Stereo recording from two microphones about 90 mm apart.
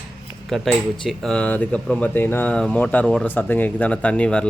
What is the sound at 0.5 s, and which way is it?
Speech, centre (ahead or behind).